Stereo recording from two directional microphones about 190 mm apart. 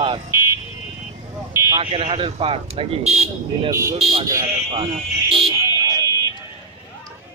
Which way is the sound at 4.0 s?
30° right (ahead or behind).